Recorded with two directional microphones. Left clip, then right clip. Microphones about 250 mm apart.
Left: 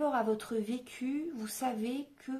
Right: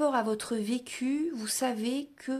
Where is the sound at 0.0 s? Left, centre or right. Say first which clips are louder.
Right 3 dB; right.